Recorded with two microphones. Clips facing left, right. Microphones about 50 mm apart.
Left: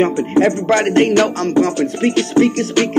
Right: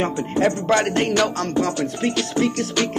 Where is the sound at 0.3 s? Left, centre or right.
Left.